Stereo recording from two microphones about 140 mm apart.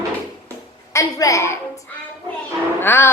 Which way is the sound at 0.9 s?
25° left (ahead or behind).